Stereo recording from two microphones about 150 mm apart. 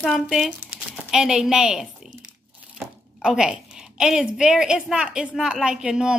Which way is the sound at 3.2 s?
5° right (ahead or behind).